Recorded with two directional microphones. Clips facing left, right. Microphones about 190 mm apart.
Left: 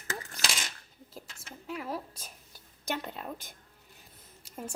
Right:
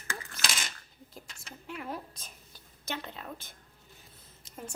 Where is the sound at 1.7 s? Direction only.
Centre (ahead or behind).